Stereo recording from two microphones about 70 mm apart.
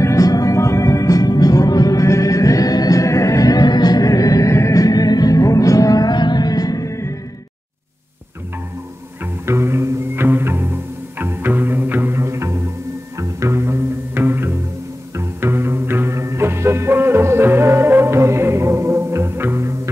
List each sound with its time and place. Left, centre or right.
0.0 s music: left
9.2 s music: right